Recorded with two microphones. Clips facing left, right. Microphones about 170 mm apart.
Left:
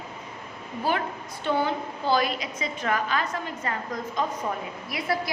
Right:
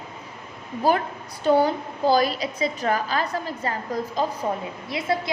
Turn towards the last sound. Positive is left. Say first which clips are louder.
# right 3 dB
turn(degrees=-25)  # may be behind; listen again after turning